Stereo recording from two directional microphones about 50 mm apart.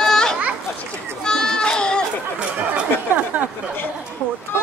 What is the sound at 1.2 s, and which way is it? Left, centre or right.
Goat, centre.